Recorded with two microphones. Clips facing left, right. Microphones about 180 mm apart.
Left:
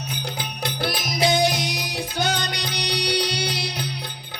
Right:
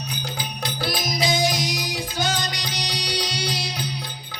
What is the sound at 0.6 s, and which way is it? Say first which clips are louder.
Music: left 1 dB; 60° left (ahead or behind).